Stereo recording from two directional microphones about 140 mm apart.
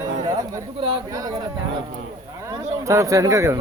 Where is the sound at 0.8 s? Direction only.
35° right (ahead or behind).